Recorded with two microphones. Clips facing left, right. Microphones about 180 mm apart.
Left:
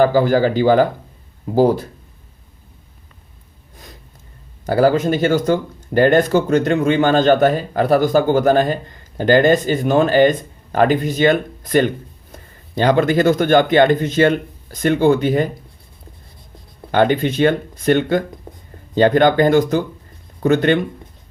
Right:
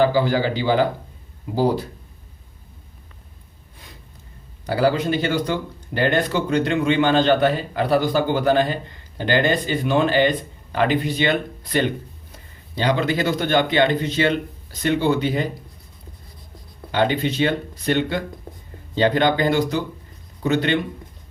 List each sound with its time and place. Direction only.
0.0 s speech: 50° left (ahead or behind)
4.6 s speech: 45° left (ahead or behind)
16.9 s speech: 50° left (ahead or behind)